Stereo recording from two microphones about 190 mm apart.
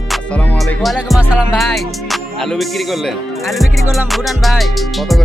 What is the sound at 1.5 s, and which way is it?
Speech, centre (ahead or behind).